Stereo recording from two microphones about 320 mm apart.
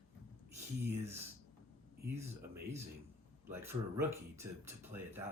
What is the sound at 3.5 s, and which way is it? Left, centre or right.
Speech, centre.